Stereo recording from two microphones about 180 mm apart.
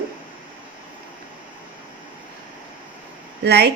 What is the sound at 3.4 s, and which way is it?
Speech, 65° right (ahead or behind).